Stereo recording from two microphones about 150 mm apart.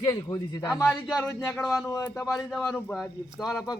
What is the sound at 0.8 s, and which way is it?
Speech, centre (ahead or behind).